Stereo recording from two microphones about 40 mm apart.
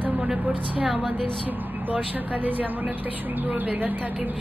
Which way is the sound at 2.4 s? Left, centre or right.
Right.